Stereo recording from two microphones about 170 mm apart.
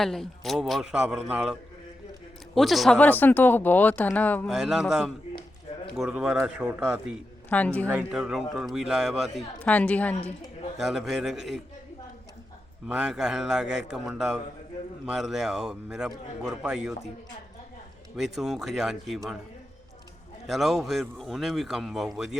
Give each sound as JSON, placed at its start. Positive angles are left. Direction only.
{"t": 0.0, "sound": "a man's voice", "side_deg": 0}
{"t": 2.6, "sound": "speech", "side_deg": 0}
{"t": 4.4, "sound": "a man's voice", "side_deg": -5}
{"t": 7.5, "sound": "speech", "side_deg": 10}
{"t": 7.9, "sound": "a man's voice", "side_deg": -5}
{"t": 9.6, "sound": "speech", "side_deg": 10}
{"t": 10.8, "sound": "a man's voice", "side_deg": 0}
{"t": 12.9, "sound": "a man's voice", "side_deg": -5}
{"t": 18.2, "sound": "a man's voice", "side_deg": 0}
{"t": 20.5, "sound": "a man's voice", "side_deg": 0}